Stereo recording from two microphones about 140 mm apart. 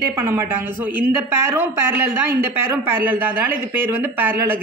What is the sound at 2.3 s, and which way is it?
Speech, 15° right (ahead or behind).